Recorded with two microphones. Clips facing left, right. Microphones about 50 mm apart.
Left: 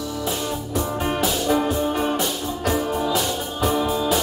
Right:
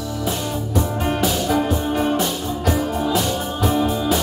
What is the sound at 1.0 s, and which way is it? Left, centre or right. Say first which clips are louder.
Music: even; centre.